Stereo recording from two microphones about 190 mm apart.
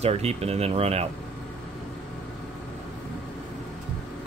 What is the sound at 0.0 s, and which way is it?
Speech, 35° right (ahead or behind).